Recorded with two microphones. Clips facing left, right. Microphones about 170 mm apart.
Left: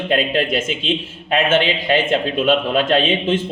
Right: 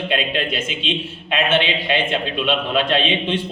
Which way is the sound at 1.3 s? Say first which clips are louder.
Left 3 dB; 45° left (ahead or behind).